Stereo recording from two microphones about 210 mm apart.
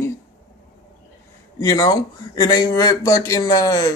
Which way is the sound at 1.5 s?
20° left (ahead or behind).